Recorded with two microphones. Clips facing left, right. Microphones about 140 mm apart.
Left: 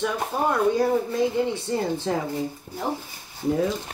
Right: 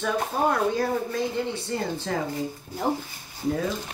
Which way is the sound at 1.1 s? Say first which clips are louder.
Left 4 dB; 20° left (ahead or behind).